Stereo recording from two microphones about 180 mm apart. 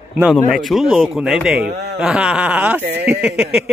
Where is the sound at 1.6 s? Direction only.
65° right (ahead or behind).